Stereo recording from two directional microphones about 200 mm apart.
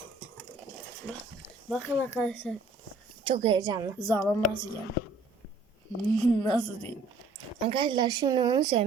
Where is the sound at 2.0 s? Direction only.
10° left (ahead or behind).